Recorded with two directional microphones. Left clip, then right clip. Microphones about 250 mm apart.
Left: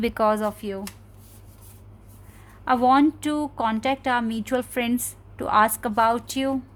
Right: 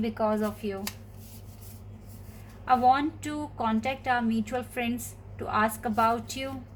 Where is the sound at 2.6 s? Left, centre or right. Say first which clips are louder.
Left 4 dB; left.